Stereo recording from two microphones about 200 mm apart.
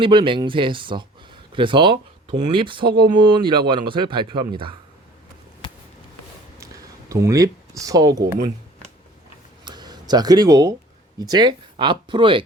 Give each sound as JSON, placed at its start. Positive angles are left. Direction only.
{"t": 0.0, "sound": "speech", "side_deg": -25}
{"t": 7.1, "sound": "speech", "side_deg": -15}
{"t": 9.6, "sound": "a sound", "side_deg": -20}
{"t": 11.2, "sound": "speech", "side_deg": -20}